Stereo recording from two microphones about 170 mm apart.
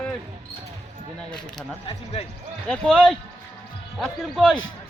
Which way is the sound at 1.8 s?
35° left (ahead or behind).